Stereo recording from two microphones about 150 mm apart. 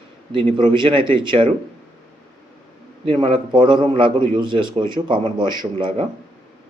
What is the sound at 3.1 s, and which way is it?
A man's voice, 35° right (ahead or behind).